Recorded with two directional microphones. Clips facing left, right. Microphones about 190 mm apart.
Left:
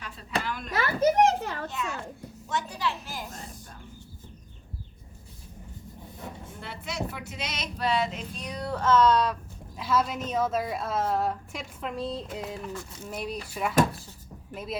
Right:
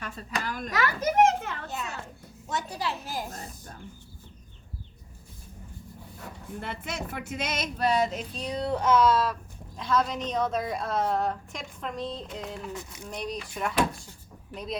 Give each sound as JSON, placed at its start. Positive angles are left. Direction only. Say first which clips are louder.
{"t": 0.0, "sound": "a sound", "louder": "left 1 dB", "side_deg": -45}
{"t": 0.7, "sound": "children playing", "louder": "left 4 dB", "side_deg": 30}
{"t": 1.7, "sound": "children playing", "louder": "left 2 dB", "side_deg": -40}
{"t": 2.5, "sound": "a woman's voice", "louder": "left 1 dB", "side_deg": -35}
{"t": 6.1, "sound": "a sound", "louder": "left 4 dB", "side_deg": 20}
{"t": 6.6, "sound": "female singing", "louder": "left 1 dB", "side_deg": -50}
{"t": 10.2, "sound": "a woman's voice", "louder": "left 1 dB", "side_deg": 5}